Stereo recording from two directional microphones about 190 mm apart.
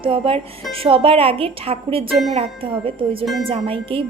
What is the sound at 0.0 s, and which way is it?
A woman's voice, 30° right (ahead or behind).